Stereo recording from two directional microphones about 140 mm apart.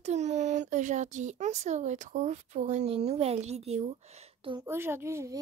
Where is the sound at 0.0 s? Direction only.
55° right (ahead or behind).